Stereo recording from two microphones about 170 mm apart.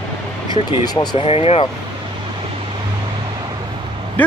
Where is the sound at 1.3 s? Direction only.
35° left (ahead or behind).